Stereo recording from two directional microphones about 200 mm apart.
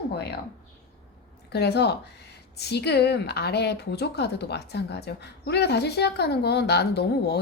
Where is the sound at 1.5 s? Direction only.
55° left (ahead or behind).